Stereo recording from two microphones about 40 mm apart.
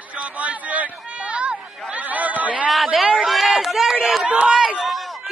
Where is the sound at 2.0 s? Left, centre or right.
Right.